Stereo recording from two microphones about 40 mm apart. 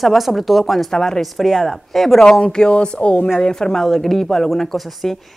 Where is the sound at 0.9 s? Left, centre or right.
Centre.